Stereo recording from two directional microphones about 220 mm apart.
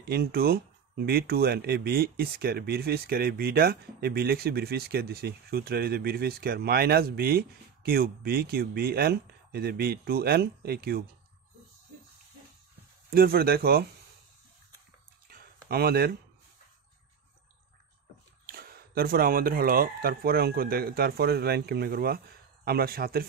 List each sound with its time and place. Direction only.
0.0 s speech: 45° right (ahead or behind)
13.1 s speech: 45° right (ahead or behind)
15.2 s a sound: 45° right (ahead or behind)
18.4 s speech: 45° right (ahead or behind)